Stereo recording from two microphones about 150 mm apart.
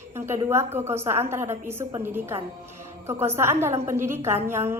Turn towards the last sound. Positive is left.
turn(degrees=-15)  # may be behind; listen again after turning